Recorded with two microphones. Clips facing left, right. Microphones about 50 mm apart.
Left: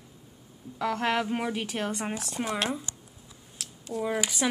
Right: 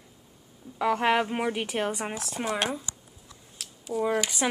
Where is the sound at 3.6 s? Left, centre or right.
Centre.